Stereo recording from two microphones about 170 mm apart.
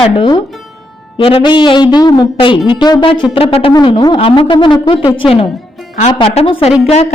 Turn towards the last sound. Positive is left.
turn(degrees=40)  # may be behind; listen again after turning